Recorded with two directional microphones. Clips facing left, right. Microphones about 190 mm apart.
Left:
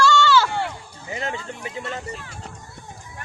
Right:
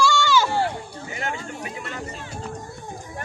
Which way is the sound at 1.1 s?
25° left (ahead or behind).